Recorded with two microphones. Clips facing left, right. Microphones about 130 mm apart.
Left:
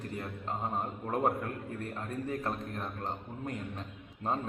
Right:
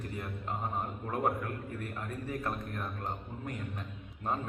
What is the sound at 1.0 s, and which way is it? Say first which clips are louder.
A man's voice: left 2 dB; 30° left (ahead or behind).